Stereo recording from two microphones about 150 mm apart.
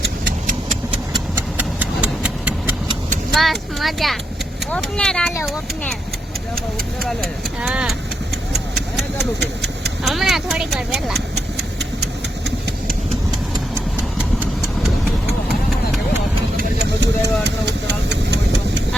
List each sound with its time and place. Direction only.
1.4 s a sound: 10° right (ahead or behind)
3.3 s speech: centre (ahead or behind)
7.2 s speech: 5° right (ahead or behind)
9.4 s speech: 90° right
10.0 s speech: centre (ahead or behind)
16.6 s engine: 90° right